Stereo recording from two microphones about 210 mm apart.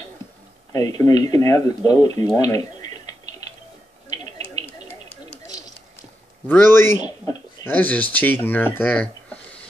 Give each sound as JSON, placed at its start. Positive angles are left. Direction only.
{"t": 0.7, "sound": "speech", "side_deg": 20}
{"t": 2.0, "sound": "typing", "side_deg": 20}
{"t": 4.2, "sound": "a sound", "side_deg": 15}
{"t": 6.4, "sound": "speech", "side_deg": 10}